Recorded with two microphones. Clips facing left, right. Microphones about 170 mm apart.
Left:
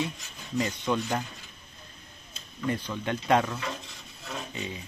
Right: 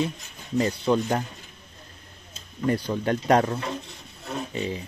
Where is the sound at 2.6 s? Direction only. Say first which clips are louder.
Right 6 dB; 40° right (ahead or behind).